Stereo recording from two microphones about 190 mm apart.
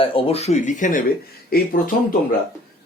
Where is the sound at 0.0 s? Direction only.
30° left (ahead or behind).